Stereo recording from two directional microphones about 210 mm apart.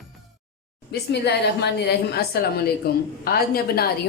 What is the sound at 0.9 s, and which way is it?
A woman's voice, 50° left (ahead or behind).